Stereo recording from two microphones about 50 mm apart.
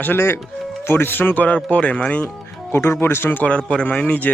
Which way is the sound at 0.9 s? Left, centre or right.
Left.